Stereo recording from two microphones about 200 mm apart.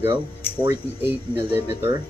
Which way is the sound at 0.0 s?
25° right (ahead or behind).